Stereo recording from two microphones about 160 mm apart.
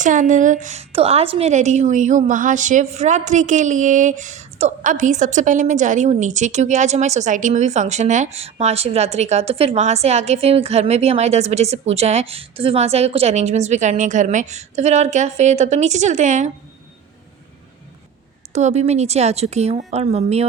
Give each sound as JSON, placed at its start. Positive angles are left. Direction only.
{"t": 0.0, "sound": "a woman's voice", "side_deg": -50}
{"t": 18.5, "sound": "a woman's voice", "side_deg": -45}